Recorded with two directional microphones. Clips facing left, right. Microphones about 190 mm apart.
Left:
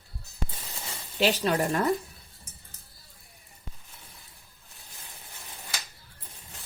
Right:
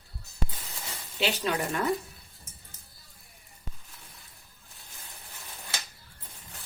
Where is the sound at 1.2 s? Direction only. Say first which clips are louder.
Left 4 dB; 40° left (ahead or behind).